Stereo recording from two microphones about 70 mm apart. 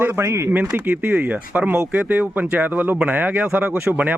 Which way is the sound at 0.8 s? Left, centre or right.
Right.